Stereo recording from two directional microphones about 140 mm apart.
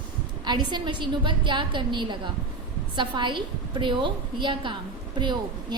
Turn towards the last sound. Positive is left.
turn(degrees=-30)  # may be behind; listen again after turning